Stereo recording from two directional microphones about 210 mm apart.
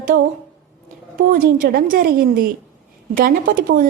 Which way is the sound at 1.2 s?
40° right (ahead or behind).